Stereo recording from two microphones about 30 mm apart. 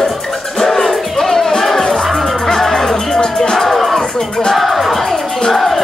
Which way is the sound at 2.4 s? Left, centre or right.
Centre.